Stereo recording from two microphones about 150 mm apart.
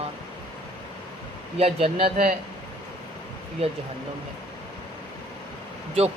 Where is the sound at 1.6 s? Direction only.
45° right (ahead or behind).